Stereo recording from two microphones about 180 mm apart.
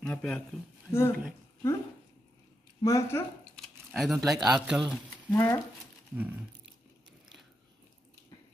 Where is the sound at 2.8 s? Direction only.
15° left (ahead or behind).